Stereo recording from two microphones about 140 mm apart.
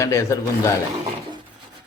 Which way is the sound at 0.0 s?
20° left (ahead or behind).